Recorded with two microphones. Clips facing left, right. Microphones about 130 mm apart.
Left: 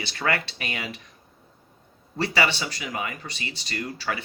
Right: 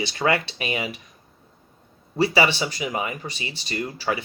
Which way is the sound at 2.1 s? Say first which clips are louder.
Right 5 dB; 15° right (ahead or behind).